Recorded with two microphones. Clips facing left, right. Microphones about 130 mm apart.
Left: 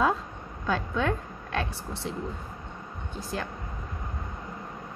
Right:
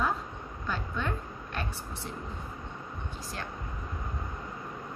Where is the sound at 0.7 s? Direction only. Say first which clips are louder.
Left 7 dB; 90° left.